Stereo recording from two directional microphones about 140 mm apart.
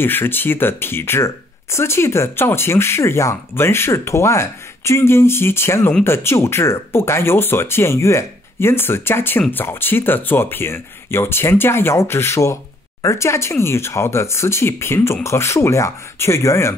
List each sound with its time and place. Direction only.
0.0 s speech: 15° left (ahead or behind)